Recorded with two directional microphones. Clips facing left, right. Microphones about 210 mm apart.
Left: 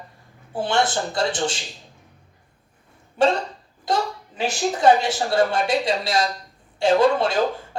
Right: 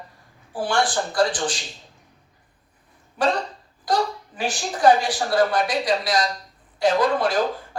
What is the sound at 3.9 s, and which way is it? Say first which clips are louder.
Speech: right 1 dB; 25° left (ahead or behind).